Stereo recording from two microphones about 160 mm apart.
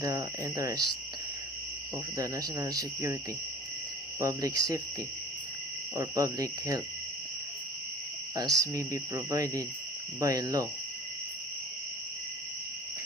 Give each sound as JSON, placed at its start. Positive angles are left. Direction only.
{"t": 0.0, "sound": "speech", "side_deg": -25}
{"t": 2.1, "sound": "speech", "side_deg": -20}
{"t": 4.2, "sound": "speech", "side_deg": -25}
{"t": 6.0, "sound": "speech", "side_deg": -20}
{"t": 8.4, "sound": "speech", "side_deg": -20}